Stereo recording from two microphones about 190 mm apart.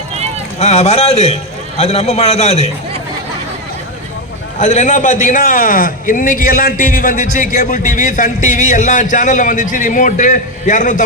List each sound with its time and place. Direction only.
0.6 s a man's voice: 35° left (ahead or behind)
4.5 s speech: 40° left (ahead or behind)